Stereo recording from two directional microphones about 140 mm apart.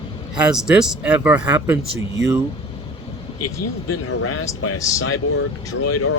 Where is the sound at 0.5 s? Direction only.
5° right (ahead or behind).